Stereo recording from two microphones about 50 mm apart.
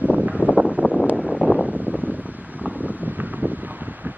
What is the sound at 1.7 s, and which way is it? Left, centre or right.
Wind, right.